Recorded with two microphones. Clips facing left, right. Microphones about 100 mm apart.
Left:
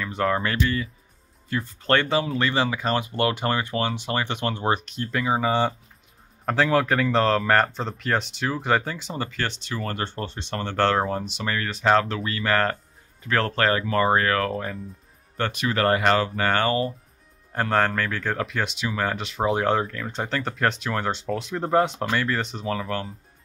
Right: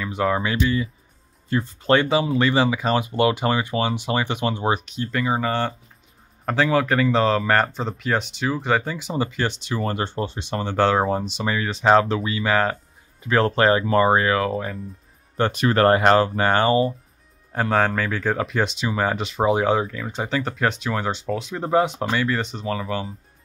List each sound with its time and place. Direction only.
0.0 s speech: 5° right (ahead or behind)
15.5 s speech: 35° right (ahead or behind); by 16.9 s 20° right (ahead or behind)
17.5 s speech: 5° right (ahead or behind)